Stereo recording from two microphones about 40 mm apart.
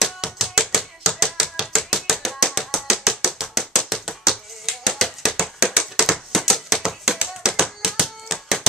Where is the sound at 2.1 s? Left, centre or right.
Centre.